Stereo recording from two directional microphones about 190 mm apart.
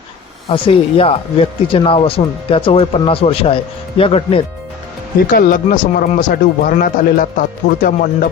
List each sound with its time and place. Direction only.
0.5 s speech: 30° left (ahead or behind)
5.3 s speech: 50° left (ahead or behind)